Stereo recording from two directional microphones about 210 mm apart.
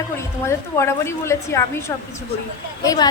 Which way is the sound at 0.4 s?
15° left (ahead or behind).